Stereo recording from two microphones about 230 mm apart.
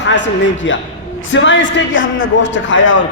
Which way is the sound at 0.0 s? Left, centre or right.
Left.